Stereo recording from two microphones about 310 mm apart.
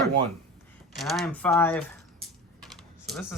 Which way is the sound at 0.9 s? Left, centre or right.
Centre.